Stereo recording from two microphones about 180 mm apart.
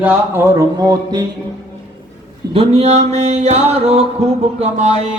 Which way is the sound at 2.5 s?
35° right (ahead or behind).